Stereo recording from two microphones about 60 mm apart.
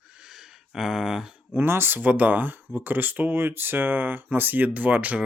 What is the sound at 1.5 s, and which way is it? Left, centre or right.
Speech, right.